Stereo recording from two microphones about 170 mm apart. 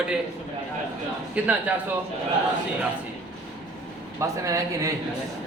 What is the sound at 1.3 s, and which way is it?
Speech, 10° right (ahead or behind).